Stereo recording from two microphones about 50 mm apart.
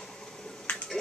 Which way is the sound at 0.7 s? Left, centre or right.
Left.